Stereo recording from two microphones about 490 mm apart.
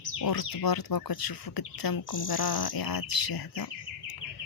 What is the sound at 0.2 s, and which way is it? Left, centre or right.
Speech, left.